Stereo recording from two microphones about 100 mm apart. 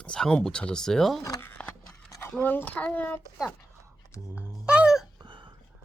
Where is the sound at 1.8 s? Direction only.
35° left (ahead or behind).